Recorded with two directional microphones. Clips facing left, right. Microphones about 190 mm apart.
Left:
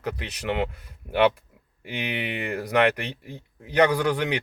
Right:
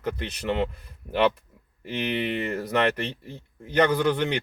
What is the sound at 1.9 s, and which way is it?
Speech, 10° left (ahead or behind).